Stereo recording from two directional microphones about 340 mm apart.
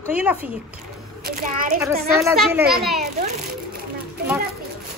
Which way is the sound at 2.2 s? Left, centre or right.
Centre.